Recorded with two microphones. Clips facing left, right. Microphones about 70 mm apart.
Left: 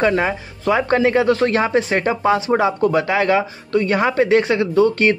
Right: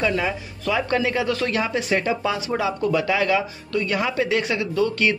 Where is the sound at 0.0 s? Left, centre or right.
Left.